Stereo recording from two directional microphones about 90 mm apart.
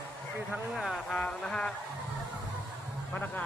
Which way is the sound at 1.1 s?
10° left (ahead or behind).